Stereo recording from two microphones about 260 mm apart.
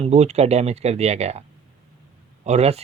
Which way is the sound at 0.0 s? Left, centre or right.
Right.